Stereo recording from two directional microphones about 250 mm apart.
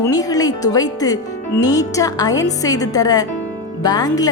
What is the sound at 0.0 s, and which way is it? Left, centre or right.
A woman's voice, centre.